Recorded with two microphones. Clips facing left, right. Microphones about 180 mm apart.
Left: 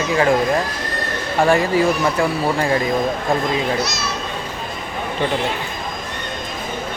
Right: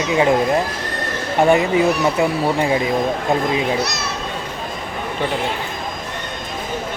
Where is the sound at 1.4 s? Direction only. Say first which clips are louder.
Right 1 dB; 20° right (ahead or behind).